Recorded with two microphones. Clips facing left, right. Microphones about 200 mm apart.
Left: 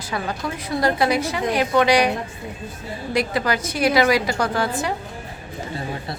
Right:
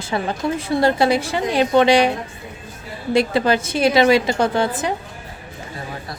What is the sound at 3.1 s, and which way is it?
A woman's voice, 25° right (ahead or behind).